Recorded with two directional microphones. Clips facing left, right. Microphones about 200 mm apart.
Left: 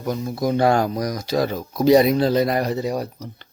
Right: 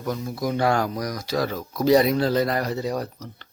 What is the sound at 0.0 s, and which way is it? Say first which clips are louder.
Speech: left 4 dB; 20° left (ahead or behind).